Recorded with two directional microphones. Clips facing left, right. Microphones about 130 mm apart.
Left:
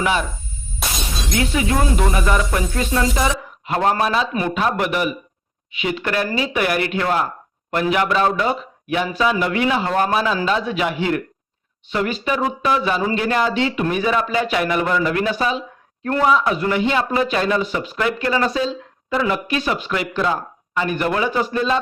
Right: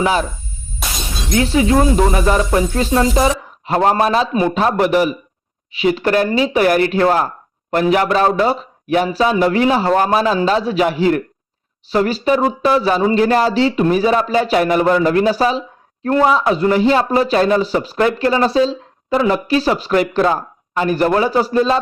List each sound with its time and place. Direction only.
0.0 s speech: 35° right (ahead or behind)
0.8 s shatter: centre (ahead or behind)
1.3 s speech: 30° right (ahead or behind)